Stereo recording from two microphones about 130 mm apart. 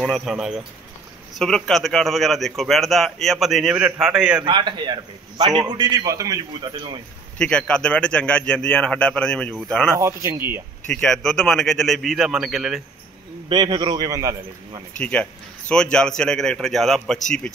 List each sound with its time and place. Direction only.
0.1 s speech: 5° right (ahead or behind)
4.5 s a man's voice: 35° right (ahead or behind)
7.3 s a man's voice: 5° left (ahead or behind)
9.9 s speech: 20° right (ahead or behind)
10.9 s speech: 5° left (ahead or behind)
13.5 s a man's voice: 35° right (ahead or behind)
15.0 s a man's voice: 10° left (ahead or behind)